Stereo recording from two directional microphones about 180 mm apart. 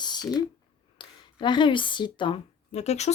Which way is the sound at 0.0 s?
25° left (ahead or behind).